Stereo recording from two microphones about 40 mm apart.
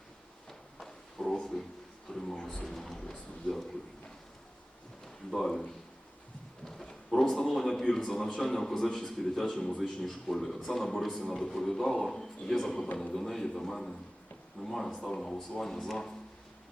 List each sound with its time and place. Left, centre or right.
0.8 s a sound: centre
2.0 s speech: centre
2.6 s a sound: centre
3.0 s speech: centre
5.3 s a man's voice: centre
6.8 s a man's voice: centre